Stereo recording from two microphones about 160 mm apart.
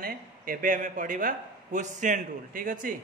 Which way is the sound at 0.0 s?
65° right (ahead or behind).